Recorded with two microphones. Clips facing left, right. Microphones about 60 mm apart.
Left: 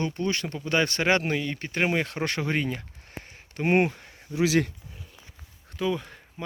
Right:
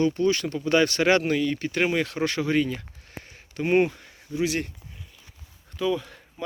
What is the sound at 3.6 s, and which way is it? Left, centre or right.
Speech, left.